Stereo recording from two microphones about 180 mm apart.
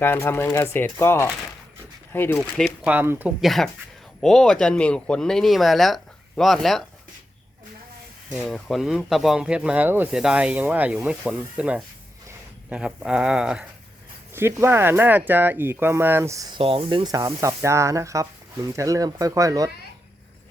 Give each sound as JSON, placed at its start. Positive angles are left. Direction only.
{"t": 0.0, "sound": "speech", "side_deg": 10}
{"t": 2.8, "sound": "speech", "side_deg": -10}
{"t": 3.4, "sound": "speech", "side_deg": 0}
{"t": 8.3, "sound": "speech", "side_deg": 0}
{"t": 16.6, "sound": "speech", "side_deg": -30}